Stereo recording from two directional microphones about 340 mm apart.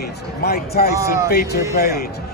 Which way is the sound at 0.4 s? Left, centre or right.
Left.